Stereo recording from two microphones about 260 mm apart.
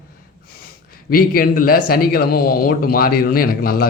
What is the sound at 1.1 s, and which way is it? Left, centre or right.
A man's voice, left.